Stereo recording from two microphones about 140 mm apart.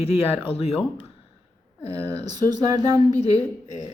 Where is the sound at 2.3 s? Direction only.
25° right (ahead or behind).